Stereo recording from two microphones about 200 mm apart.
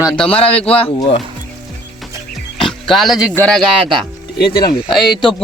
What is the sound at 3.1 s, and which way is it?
Speech, 15° left (ahead or behind).